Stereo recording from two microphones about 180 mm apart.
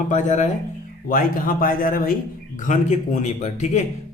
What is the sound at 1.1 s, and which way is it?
Speech, 50° left (ahead or behind).